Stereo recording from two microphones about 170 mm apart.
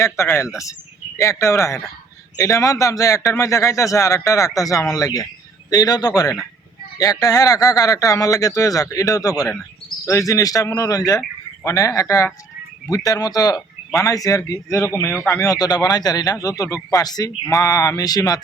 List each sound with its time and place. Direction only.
0.5 s speech: 20° left (ahead or behind)